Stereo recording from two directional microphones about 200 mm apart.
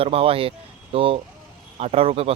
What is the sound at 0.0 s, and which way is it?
Speech, 30° right (ahead or behind).